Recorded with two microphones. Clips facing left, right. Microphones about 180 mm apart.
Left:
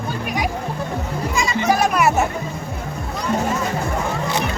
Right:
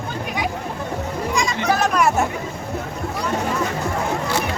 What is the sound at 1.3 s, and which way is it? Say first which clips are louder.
Music: left 2 dB; 5° left (ahead or behind).